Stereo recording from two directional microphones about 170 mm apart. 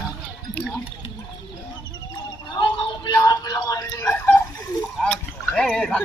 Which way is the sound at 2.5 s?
25° left (ahead or behind).